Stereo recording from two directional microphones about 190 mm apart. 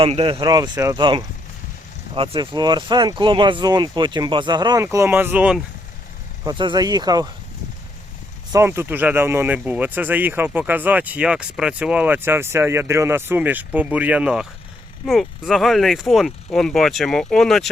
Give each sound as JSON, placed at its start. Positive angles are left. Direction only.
{"t": 0.0, "sound": "speech", "side_deg": -30}
{"t": 6.4, "sound": "speech", "side_deg": -25}
{"t": 8.5, "sound": "speech", "side_deg": -15}